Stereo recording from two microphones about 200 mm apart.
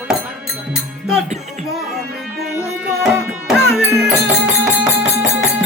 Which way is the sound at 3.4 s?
Centre (ahead or behind).